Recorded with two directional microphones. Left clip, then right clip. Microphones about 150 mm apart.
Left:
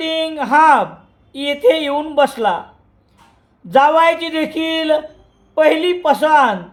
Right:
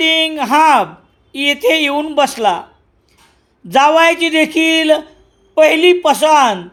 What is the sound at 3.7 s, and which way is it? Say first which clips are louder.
A man's voice: right 2 dB; 30° right (ahead or behind).